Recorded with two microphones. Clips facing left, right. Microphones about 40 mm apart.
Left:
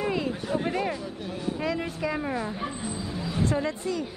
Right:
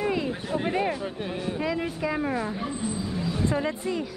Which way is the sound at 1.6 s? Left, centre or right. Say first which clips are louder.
Right 1 dB; centre.